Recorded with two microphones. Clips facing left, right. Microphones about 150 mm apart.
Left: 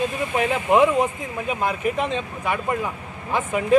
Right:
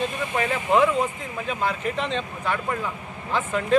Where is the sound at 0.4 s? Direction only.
15° left (ahead or behind).